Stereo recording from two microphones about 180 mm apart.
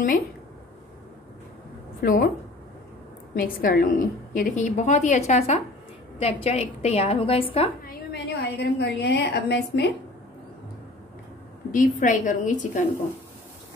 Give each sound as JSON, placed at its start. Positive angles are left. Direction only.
{"t": 2.0, "sound": "a woman's voice", "side_deg": 55}
{"t": 3.3, "sound": "a woman's voice", "side_deg": 55}
{"t": 7.8, "sound": "a woman's voice", "side_deg": 60}
{"t": 11.7, "sound": "a woman's voice", "side_deg": 45}